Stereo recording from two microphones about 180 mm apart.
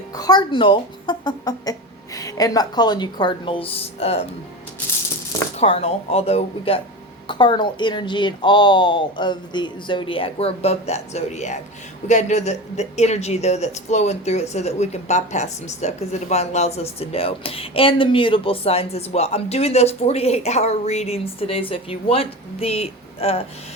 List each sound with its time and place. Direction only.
0.2 s speech: 25° left (ahead or behind)
5.5 s speech: 35° left (ahead or behind)